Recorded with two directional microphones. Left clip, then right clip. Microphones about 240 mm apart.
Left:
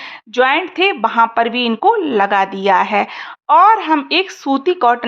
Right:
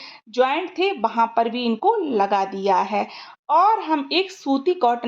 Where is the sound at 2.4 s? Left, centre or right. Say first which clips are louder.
Left 7 dB; left.